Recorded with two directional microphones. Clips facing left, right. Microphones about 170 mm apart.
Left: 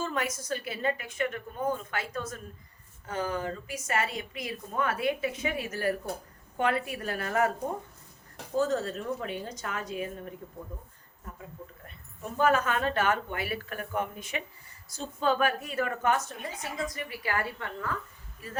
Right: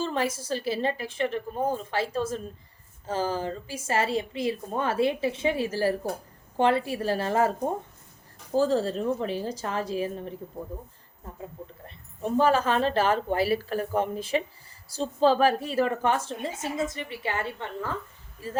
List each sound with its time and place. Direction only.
0.0 s a woman's voice: 30° right (ahead or behind)
8.5 s speech: 30° right (ahead or behind)
11.9 s a woman's voice: 30° right (ahead or behind)